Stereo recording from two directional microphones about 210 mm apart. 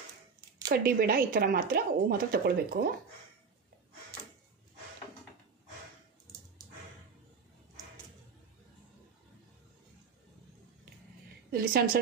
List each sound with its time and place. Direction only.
0.7 s speech: 45° right (ahead or behind)
11.5 s speech: 45° right (ahead or behind)